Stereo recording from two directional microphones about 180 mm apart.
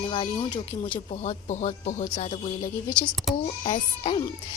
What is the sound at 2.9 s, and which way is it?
Speech, 5° left (ahead or behind).